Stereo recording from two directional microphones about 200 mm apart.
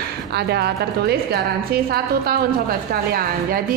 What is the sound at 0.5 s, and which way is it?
A woman's voice, 55° right (ahead or behind).